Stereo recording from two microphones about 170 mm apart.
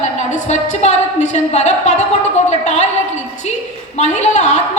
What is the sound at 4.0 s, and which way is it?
Speech, 40° left (ahead or behind).